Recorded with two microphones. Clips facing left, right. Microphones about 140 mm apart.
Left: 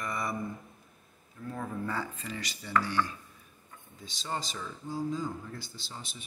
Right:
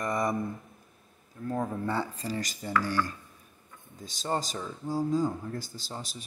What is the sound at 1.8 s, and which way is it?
Speech, 35° right (ahead or behind).